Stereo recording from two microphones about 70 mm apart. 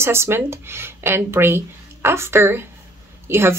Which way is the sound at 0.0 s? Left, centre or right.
Right.